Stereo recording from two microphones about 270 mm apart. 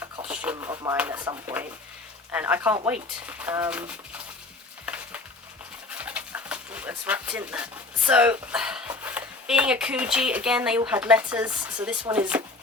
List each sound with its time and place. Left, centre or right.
0.5 s speech: centre
4.9 s stir: centre
5.9 s speech: centre